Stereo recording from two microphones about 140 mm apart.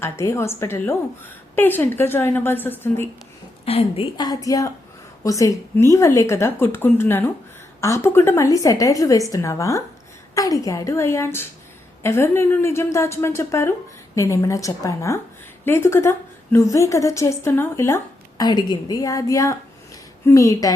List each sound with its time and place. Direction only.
0.0 s a woman's voice: 20° left (ahead or behind)
3.7 s a woman's voice: 45° left (ahead or behind)
4.2 s a woman's voice: 25° left (ahead or behind)